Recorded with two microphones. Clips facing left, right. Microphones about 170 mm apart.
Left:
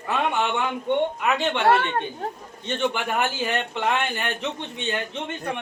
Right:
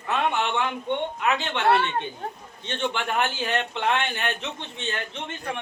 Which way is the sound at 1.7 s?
50° left (ahead or behind).